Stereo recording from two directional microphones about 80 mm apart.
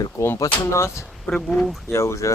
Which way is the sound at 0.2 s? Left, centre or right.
Left.